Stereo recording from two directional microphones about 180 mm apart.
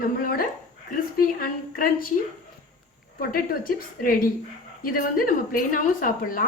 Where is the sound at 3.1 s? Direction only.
55° left (ahead or behind).